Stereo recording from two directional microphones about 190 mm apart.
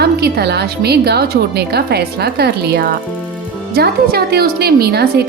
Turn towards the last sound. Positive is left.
turn(degrees=-55)  # may be behind; listen again after turning